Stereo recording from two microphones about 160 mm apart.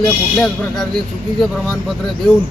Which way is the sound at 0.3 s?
5° left (ahead or behind).